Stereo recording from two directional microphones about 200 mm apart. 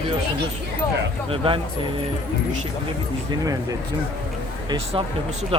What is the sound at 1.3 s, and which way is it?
Speech, 25° right (ahead or behind).